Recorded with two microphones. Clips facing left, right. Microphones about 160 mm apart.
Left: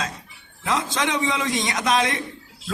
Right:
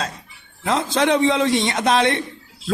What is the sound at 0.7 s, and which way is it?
A man's voice, 35° right (ahead or behind).